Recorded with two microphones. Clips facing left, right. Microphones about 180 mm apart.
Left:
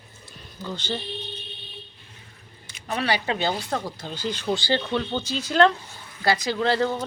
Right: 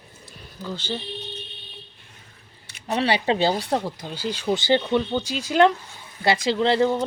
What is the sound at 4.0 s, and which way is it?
Speech, 10° right (ahead or behind).